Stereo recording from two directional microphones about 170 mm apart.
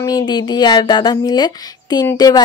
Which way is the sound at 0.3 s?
25° left (ahead or behind).